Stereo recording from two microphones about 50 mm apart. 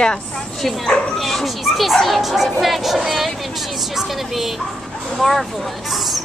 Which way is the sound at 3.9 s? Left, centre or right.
Centre.